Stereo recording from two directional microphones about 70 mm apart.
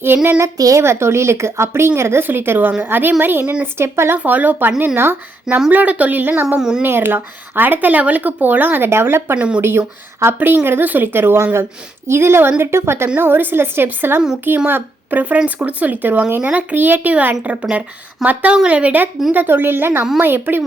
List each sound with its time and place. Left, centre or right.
0.1 s speech: right
0.5 s a woman's voice: right
0.8 s speech: right
3.4 s speech: centre
3.8 s speech: right
4.2 s speech: right
5.7 s speech: right
6.6 s speech: centre
6.8 s speech: right